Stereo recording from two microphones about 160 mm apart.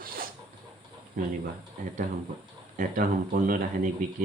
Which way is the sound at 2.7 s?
55° right (ahead or behind).